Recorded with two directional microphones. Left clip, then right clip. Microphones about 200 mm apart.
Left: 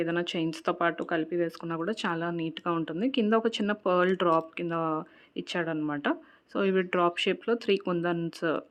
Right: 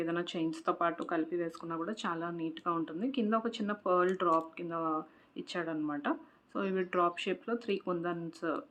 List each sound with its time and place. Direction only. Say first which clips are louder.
0.0 s speech: left 5 dB; 40° left (ahead or behind)